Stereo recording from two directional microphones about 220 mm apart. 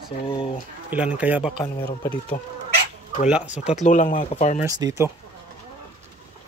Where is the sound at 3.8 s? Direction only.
35° left (ahead or behind).